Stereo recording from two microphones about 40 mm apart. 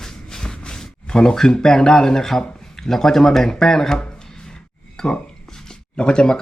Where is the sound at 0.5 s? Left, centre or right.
Left.